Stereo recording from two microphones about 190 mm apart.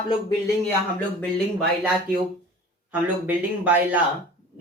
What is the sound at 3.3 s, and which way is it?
Speech, 10° right (ahead or behind).